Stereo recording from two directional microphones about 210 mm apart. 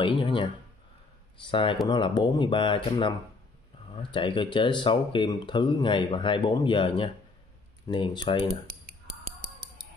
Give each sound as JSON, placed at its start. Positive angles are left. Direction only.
{"t": 0.0, "sound": "a sound", "side_deg": 25}
{"t": 1.4, "sound": "speech", "side_deg": 25}
{"t": 7.9, "sound": "speech", "side_deg": 20}